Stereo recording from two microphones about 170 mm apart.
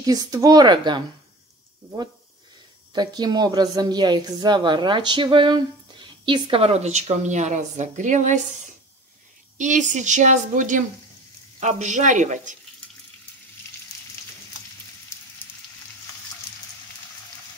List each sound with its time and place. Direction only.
0.0 s a woman's voice: 20° right (ahead or behind)
2.9 s a woman's voice: 25° right (ahead or behind); by 8.4 s 45° right (ahead or behind)
9.6 s a woman's voice: 45° right (ahead or behind)